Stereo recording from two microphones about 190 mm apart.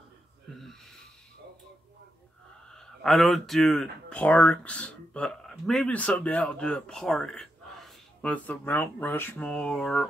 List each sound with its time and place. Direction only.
0.5 s speech: centre (ahead or behind)
2.7 s speech: 5° left (ahead or behind)